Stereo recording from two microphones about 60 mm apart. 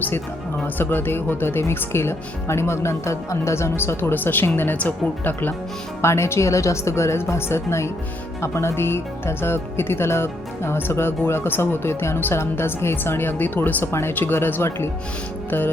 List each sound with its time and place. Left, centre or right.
0.6 s speech: left
4.1 s speech: left
6.0 s speech: left
15.4 s music: left